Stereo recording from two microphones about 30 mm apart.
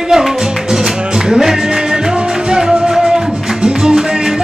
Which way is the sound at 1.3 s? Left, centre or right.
Centre.